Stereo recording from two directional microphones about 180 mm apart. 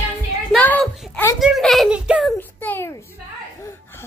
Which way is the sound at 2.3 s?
10° left (ahead or behind).